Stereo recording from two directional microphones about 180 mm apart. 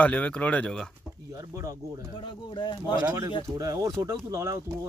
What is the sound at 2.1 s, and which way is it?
Speech, 30° left (ahead or behind).